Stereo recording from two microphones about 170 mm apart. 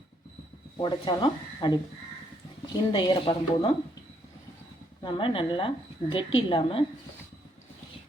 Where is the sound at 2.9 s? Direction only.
30° left (ahead or behind).